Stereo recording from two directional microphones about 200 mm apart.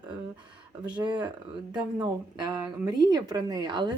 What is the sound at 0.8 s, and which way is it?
A woman's voice, 20° right (ahead or behind).